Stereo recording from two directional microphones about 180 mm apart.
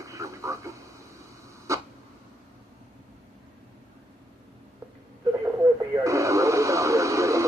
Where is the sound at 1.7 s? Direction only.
15° right (ahead or behind).